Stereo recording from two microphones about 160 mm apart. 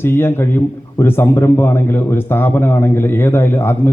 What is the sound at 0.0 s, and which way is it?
A man's voice, 15° left (ahead or behind).